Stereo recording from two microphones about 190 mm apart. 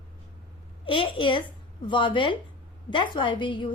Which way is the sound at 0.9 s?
25° left (ahead or behind).